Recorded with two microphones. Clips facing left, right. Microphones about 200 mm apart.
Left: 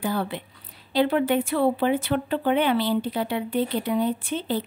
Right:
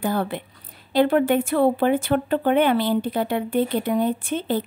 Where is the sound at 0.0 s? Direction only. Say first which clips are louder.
Right 3 dB; 50° right (ahead or behind).